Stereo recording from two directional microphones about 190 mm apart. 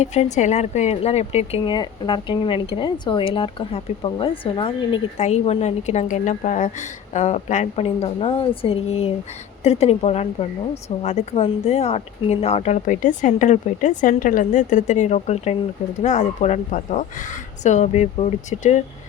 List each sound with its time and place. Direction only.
0.0 s speech: 35° left (ahead or behind)